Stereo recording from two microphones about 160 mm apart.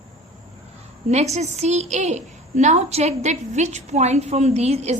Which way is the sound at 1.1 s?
45° right (ahead or behind).